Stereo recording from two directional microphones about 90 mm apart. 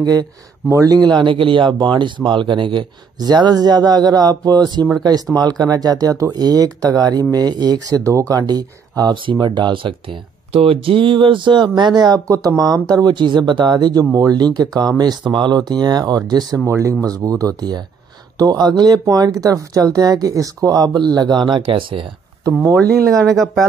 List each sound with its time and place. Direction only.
0.0 s speech: 50° right (ahead or behind); by 2.9 s 65° right (ahead or behind)
3.2 s speech: 50° right (ahead or behind)
8.0 s speech: 35° right (ahead or behind); by 9.9 s 60° right (ahead or behind)
10.5 s speech: 90° right; by 22.0 s 70° right (ahead or behind)
22.8 s speech: 5° left (ahead or behind)